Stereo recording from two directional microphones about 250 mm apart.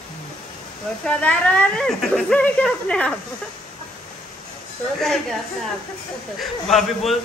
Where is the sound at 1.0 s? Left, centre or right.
Centre.